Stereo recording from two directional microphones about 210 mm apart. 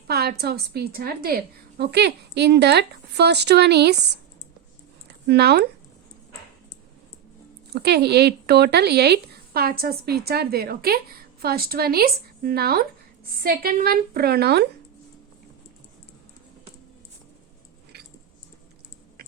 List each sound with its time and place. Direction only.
0.1 s speech: 50° right (ahead or behind)
5.0 s a sound: 50° right (ahead or behind)
7.7 s speech: 50° right (ahead or behind)